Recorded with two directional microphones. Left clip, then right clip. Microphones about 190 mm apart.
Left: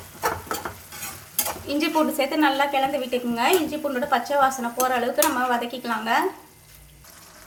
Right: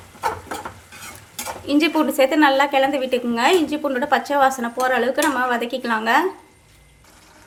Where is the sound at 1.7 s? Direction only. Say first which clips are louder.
Right 4 dB; 40° right (ahead or behind).